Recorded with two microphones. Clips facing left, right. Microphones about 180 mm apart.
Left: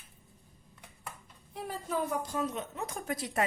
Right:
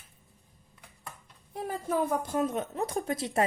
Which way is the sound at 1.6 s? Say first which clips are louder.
Right 4 dB; 50° right (ahead or behind).